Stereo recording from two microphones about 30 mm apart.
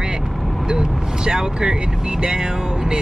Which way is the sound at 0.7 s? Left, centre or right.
Right.